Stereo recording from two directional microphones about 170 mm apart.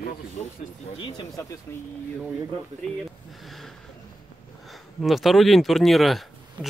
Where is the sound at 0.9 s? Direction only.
25° left (ahead or behind).